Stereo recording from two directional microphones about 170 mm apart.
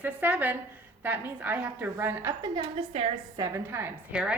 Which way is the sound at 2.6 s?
35° right (ahead or behind).